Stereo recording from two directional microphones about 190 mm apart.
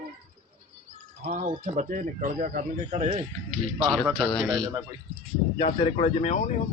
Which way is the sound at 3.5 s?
5° left (ahead or behind).